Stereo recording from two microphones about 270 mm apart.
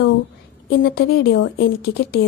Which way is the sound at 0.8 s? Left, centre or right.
Left.